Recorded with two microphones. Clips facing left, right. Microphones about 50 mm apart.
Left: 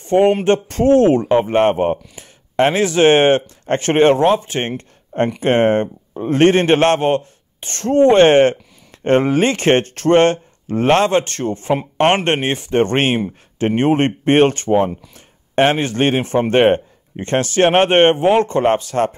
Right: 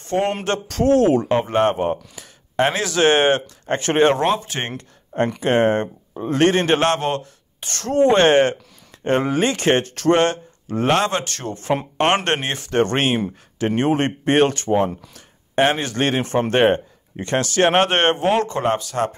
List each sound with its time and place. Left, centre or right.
0.0 s a man's voice: left
12.9 s a man's voice: left
15.1 s a sound: left
16.0 s a man's voice: left